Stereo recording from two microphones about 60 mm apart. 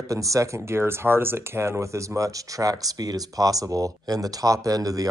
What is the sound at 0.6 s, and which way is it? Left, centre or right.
Speech, right.